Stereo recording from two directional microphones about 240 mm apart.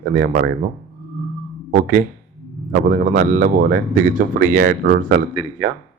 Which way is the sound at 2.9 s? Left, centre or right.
Right.